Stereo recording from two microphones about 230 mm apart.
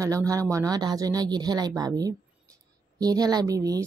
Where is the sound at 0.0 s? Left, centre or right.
Centre.